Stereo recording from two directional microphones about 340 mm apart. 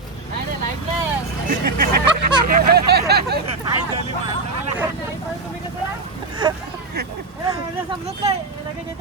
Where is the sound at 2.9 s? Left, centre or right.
Right.